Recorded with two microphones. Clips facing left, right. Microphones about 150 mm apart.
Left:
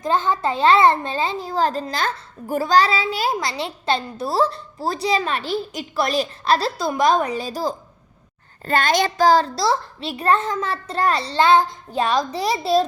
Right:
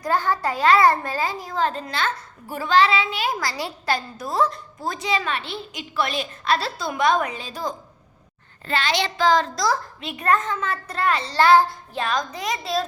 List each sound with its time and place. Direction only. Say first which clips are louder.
0.0 s a child's voice: left 2 dB; 20° left (ahead or behind); by 3.3 s 35° left (ahead or behind)
3.4 s a child's voice: left 2 dB; 25° left (ahead or behind)
8.6 s a child's voice: left 5 dB; 45° left (ahead or behind)
11.3 s child singing: even; 20° left (ahead or behind)
11.9 s a child's voice: left 5 dB; 35° left (ahead or behind)